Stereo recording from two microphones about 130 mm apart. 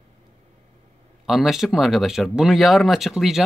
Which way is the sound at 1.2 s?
Centre (ahead or behind).